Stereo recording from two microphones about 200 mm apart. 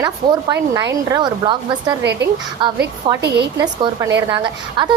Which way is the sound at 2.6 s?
25° right (ahead or behind).